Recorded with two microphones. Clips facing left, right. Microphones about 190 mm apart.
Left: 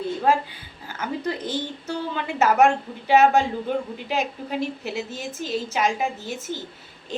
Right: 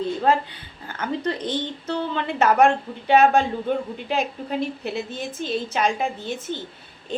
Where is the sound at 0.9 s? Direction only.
10° left (ahead or behind).